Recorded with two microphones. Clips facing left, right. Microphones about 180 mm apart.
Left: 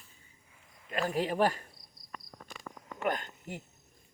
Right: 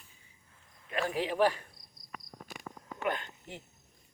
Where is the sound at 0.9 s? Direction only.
40° left (ahead or behind).